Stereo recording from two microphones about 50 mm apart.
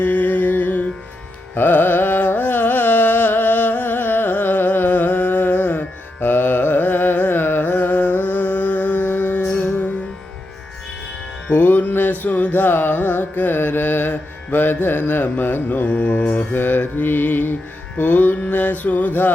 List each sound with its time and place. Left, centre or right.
0.0 s music: left
1.5 s carnatic music: left
11.5 s music: left
12.2 s carnatic music: left
15.9 s mantra: left
16.5 s mantra: left
17.9 s music: left